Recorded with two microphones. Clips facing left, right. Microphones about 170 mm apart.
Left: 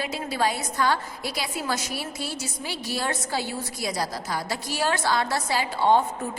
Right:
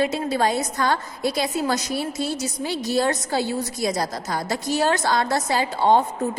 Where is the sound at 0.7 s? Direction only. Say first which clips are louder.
Right 2 dB; 45° right (ahead or behind).